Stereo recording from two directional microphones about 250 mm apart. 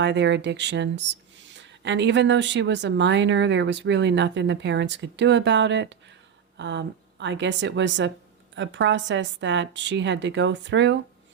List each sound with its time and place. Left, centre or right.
0.0 s speech: right